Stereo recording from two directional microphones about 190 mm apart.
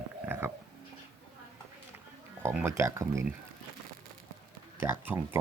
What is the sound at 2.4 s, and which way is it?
Speech, 10° right (ahead or behind).